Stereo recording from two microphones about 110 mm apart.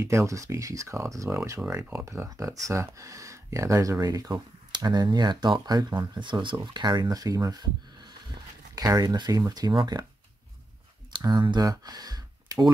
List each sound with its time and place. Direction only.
0.0 s speech: 25° right (ahead or behind)
11.2 s speech: 45° right (ahead or behind)